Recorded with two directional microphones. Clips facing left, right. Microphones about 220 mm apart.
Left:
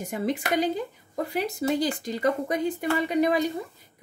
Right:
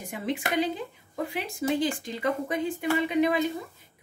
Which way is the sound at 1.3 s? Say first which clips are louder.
Left 3 dB; 40° left (ahead or behind).